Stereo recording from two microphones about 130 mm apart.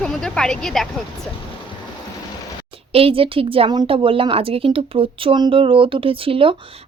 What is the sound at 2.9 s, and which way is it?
Speech, 45° right (ahead or behind).